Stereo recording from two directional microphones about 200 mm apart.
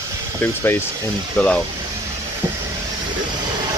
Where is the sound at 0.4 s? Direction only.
10° left (ahead or behind).